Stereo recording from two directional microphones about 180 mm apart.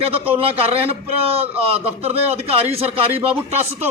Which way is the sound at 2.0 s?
35° right (ahead or behind).